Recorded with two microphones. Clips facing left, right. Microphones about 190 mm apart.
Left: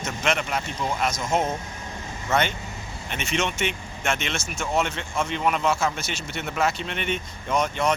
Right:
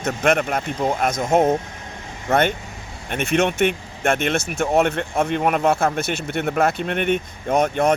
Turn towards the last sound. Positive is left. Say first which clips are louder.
# right 6 dB
turn(degrees=-55)  # may be behind; listen again after turning